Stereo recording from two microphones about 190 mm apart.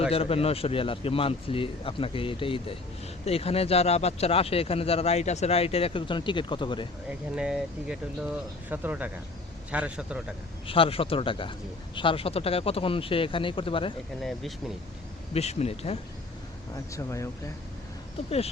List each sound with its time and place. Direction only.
0.1 s speech: 30° left (ahead or behind)
7.1 s speech: 5° right (ahead or behind)
10.7 s speech: 30° left (ahead or behind)
14.2 s speech: centre (ahead or behind)
15.3 s speech: 35° left (ahead or behind)
16.7 s speech: 15° left (ahead or behind)